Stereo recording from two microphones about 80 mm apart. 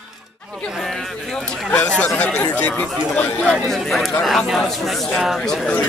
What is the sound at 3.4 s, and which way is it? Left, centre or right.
Speech, centre.